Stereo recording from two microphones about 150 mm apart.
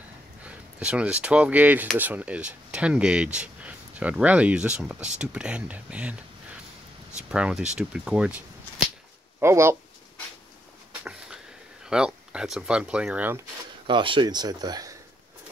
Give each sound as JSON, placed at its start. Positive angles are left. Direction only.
{"t": 0.5, "sound": "speech", "side_deg": -10}
{"t": 7.2, "sound": "speech", "side_deg": -5}
{"t": 9.4, "sound": "speech", "side_deg": -15}
{"t": 11.9, "sound": "speech", "side_deg": -5}
{"t": 13.8, "sound": "speech", "side_deg": -35}